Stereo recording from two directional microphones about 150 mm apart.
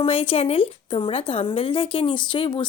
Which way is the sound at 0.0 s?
35° left (ahead or behind).